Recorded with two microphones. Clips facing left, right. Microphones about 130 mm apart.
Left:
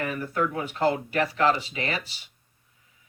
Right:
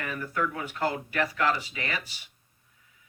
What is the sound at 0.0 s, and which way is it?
Speech, 25° left (ahead or behind).